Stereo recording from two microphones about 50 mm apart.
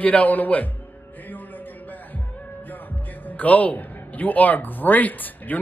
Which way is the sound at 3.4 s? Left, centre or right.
Left.